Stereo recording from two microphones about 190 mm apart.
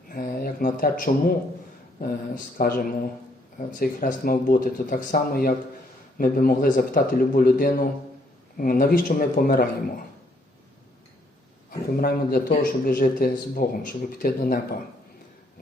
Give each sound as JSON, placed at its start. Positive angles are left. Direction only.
{"t": 0.1, "sound": "a sound", "side_deg": 50}
{"t": 2.0, "sound": "speech", "side_deg": 50}
{"t": 11.9, "sound": "speech", "side_deg": 50}